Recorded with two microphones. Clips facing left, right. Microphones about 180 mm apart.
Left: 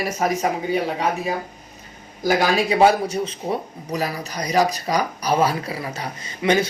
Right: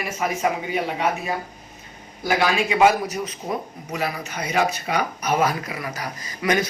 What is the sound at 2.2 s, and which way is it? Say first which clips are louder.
Speech: left 2 dB; 40° left (ahead or behind).